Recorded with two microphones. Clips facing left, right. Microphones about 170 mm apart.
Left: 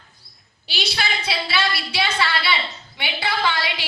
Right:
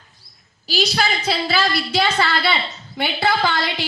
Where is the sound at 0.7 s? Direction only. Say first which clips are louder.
Right 6 dB; 40° right (ahead or behind).